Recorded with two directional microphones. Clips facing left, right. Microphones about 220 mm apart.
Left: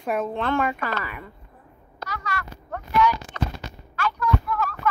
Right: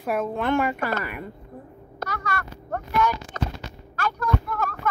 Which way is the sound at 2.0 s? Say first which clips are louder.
Right 2 dB; 55° right (ahead or behind).